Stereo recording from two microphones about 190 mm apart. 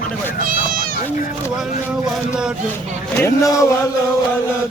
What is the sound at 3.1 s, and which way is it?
Speech, 15° left (ahead or behind).